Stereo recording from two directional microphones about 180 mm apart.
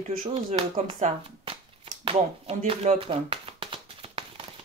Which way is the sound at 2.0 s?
30° right (ahead or behind).